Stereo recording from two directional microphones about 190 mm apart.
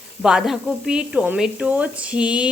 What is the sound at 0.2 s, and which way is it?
Speech, 5° right (ahead or behind).